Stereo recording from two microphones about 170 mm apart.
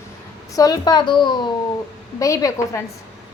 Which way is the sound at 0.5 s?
20° left (ahead or behind).